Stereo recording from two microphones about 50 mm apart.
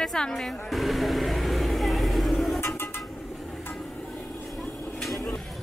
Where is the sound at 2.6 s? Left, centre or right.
Left.